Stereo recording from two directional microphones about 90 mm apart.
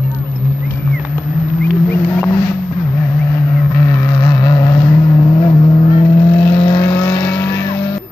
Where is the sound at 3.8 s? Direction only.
40° left (ahead or behind); by 4.8 s 55° left (ahead or behind).